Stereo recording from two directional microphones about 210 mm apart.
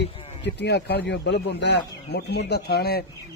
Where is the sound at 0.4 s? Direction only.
55° left (ahead or behind).